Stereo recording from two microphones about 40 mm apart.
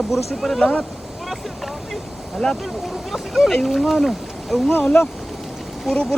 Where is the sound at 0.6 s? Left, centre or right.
Left.